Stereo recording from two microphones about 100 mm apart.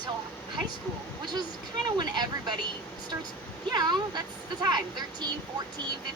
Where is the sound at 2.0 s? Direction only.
45° right (ahead or behind).